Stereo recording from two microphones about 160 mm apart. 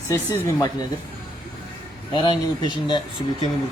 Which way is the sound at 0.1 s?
20° left (ahead or behind).